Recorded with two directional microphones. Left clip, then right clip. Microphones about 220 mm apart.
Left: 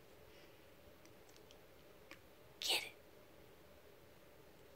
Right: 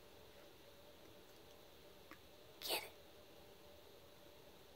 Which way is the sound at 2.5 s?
20° right (ahead or behind).